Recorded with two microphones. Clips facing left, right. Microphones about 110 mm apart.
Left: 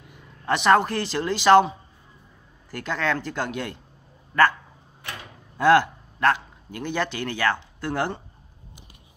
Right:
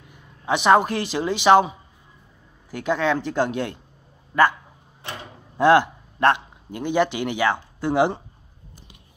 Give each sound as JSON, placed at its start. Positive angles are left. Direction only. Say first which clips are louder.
{"t": 0.5, "sound": "speech", "louder": "right 2 dB", "side_deg": -5}
{"t": 5.0, "sound": "a sound", "louder": "right 3 dB", "side_deg": -25}
{"t": 5.6, "sound": "speech", "louder": "right 2 dB", "side_deg": -15}